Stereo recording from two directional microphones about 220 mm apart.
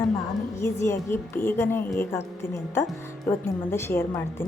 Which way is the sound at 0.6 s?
10° left (ahead or behind).